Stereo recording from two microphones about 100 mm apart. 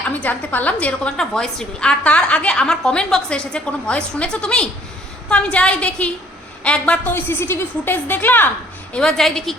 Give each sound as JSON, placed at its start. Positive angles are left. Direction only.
{"t": 0.1, "sound": "a woman's voice", "side_deg": 15}
{"t": 8.9, "sound": "a woman's voice", "side_deg": 5}